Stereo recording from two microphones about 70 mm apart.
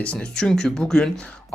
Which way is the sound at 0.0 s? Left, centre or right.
Centre.